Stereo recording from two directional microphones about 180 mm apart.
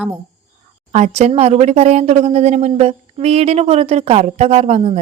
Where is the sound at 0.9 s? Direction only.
40° right (ahead or behind).